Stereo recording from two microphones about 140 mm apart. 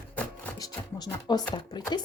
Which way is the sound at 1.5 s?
30° left (ahead or behind).